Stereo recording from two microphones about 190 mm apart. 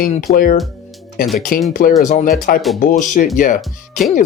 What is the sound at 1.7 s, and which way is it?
Speech, 45° left (ahead or behind).